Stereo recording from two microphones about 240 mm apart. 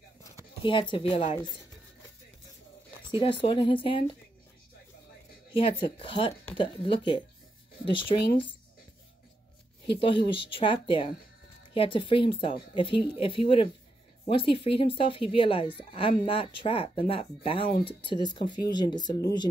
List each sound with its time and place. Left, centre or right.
0.2 s speech: centre
3.1 s speech: left
5.6 s speech: left
9.8 s speech: left